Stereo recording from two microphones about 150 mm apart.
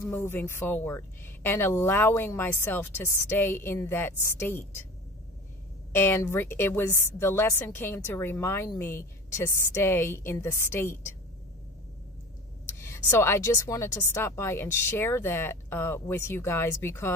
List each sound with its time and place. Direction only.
0.0 s a woman's voice: 15° left (ahead or behind)
5.9 s a woman's voice: 15° left (ahead or behind)
12.6 s a woman's voice: 20° left (ahead or behind)